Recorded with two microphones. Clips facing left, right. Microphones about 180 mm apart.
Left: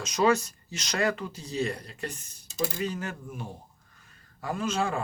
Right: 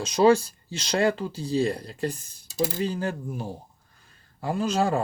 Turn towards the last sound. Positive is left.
turn(degrees=-35)  # may be behind; listen again after turning